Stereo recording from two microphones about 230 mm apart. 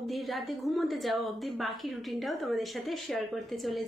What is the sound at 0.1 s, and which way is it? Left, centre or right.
A woman's voice, centre.